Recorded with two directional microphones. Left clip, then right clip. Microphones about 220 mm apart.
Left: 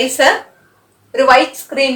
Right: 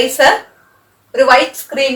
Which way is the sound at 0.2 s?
20° left (ahead or behind).